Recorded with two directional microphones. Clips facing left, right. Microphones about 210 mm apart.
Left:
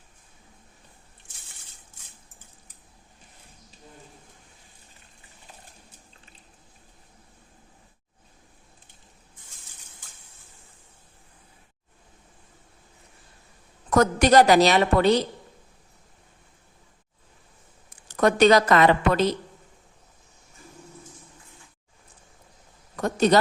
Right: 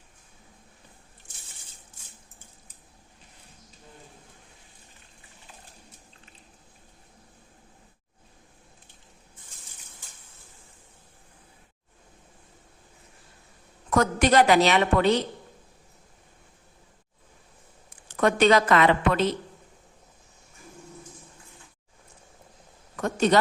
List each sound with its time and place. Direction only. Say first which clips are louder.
13.9 s a woman's voice: left 3 dB; 40° left (ahead or behind)
17.8 s speech: left 2 dB; 40° left (ahead or behind)
23.0 s a sound: left 2 dB; 35° left (ahead or behind)